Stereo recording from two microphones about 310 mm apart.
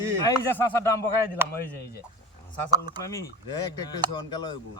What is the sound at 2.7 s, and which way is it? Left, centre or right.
Speech, centre.